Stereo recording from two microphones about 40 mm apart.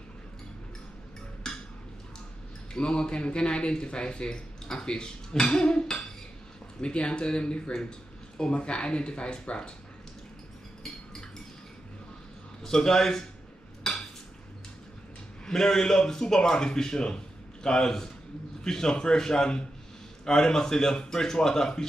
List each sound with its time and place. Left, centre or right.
1.5 s a sound: centre
2.7 s speech: left
12.6 s a man's voice: centre
13.9 s dishes: centre
15.4 s a man's voice: centre